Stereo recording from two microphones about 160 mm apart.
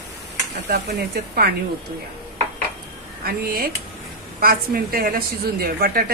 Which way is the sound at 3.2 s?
65° right (ahead or behind).